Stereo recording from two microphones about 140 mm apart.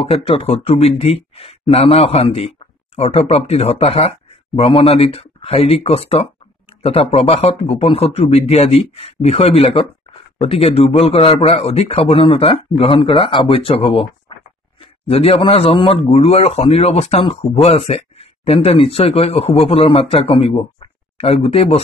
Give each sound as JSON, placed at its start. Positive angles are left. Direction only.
{"t": 0.0, "sound": "a man's voice", "side_deg": 45}